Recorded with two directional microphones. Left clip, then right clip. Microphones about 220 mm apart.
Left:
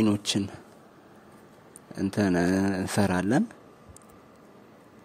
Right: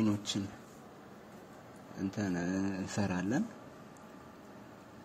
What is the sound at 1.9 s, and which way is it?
A man's voice, 55° left (ahead or behind).